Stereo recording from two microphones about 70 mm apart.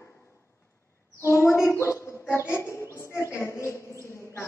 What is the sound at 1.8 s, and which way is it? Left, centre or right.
Bird, left.